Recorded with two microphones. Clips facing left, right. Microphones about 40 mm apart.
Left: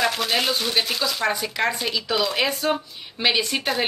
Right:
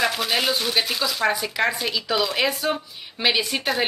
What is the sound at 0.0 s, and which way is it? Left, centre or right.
A woman's voice, centre.